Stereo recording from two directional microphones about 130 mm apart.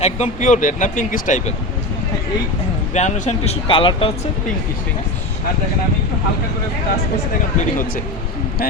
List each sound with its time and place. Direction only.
0.0 s speech: 65° left (ahead or behind); by 1.5 s 80° left
2.9 s a man's voice: 60° left (ahead or behind)
3.7 s speech: 40° left (ahead or behind)